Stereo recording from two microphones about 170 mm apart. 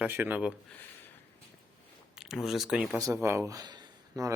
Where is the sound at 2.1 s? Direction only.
Centre (ahead or behind).